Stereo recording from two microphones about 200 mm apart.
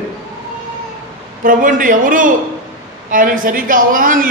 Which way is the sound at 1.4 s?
40° right (ahead or behind).